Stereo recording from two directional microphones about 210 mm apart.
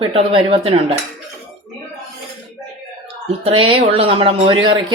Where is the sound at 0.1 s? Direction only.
25° right (ahead or behind).